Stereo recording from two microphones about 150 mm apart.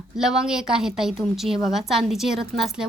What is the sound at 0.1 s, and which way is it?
A woman's voice, 5° right (ahead or behind).